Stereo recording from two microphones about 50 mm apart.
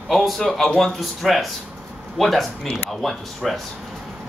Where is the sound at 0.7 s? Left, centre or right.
Centre.